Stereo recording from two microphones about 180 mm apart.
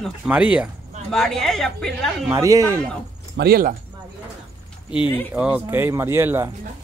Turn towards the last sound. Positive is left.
turn(degrees=-15)  # may be behind; listen again after turning